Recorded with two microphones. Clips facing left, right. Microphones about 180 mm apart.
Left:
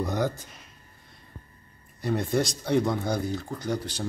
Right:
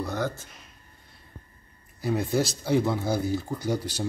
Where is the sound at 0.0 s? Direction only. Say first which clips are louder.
Left 2 dB; 15° left (ahead or behind).